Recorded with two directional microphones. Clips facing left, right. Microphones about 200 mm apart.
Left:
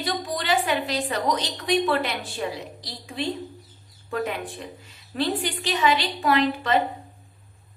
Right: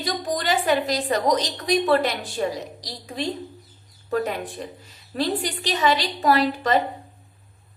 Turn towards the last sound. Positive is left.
turn(degrees=-40)  # may be behind; listen again after turning